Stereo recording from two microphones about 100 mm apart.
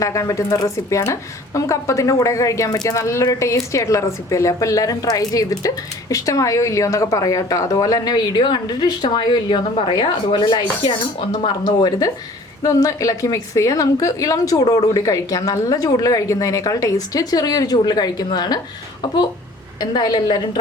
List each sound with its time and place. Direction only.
0.0 s a woman's voice: 30° left (ahead or behind); by 11.9 s 50° left (ahead or behind)
12.6 s a woman's voice: 35° left (ahead or behind)